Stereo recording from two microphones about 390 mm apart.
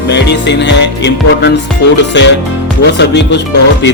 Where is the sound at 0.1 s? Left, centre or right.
Left.